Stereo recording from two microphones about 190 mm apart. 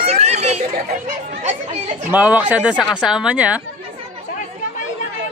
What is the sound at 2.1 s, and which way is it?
Speech, 10° right (ahead or behind).